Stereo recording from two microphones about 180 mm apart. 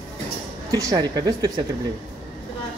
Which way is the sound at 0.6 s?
20° right (ahead or behind).